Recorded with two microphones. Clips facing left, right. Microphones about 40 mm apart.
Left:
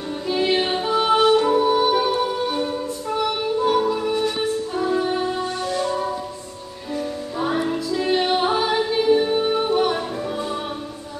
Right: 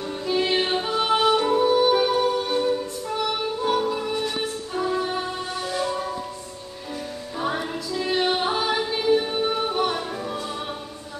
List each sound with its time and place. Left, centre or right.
0.3 s music: centre
7.3 s music: centre